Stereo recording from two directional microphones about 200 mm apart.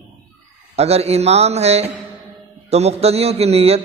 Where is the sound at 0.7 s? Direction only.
30° right (ahead or behind).